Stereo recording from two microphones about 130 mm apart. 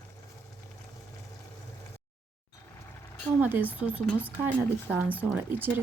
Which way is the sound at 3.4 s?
15° right (ahead or behind).